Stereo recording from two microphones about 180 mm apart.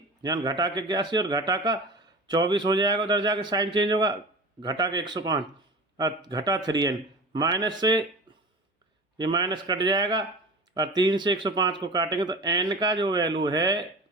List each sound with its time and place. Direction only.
0.2 s speech: 20° right (ahead or behind)
9.1 s speech: 25° right (ahead or behind)